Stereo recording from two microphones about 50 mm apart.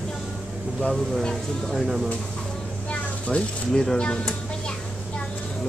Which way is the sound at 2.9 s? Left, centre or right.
Left.